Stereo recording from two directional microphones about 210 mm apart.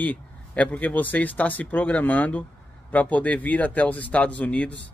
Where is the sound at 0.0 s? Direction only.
5° left (ahead or behind).